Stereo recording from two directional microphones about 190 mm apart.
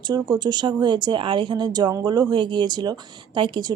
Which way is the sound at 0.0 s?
20° right (ahead or behind).